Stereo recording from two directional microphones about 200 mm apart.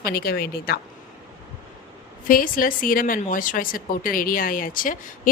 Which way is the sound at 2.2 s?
45° left (ahead or behind).